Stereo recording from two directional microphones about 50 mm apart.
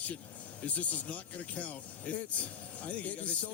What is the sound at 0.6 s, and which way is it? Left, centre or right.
Speech, left.